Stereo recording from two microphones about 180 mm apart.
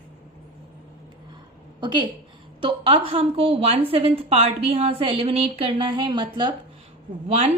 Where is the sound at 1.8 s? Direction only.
25° right (ahead or behind).